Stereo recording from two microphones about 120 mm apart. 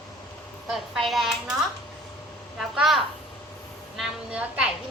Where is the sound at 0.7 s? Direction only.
Centre (ahead or behind).